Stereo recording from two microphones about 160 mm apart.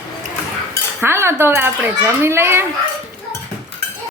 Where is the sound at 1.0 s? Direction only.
15° right (ahead or behind).